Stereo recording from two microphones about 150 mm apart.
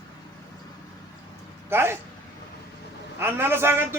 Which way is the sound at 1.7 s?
15° right (ahead or behind).